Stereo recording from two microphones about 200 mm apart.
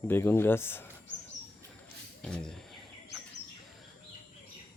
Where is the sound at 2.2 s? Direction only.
5° left (ahead or behind).